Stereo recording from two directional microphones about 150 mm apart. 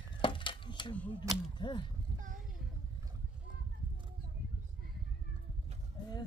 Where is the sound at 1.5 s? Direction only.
30° left (ahead or behind).